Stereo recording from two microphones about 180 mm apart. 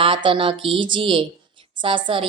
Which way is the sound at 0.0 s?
30° right (ahead or behind).